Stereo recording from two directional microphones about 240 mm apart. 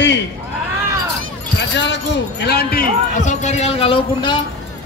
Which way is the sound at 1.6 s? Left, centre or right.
Left.